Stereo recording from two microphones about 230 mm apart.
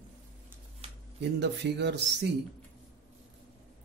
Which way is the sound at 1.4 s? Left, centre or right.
Right.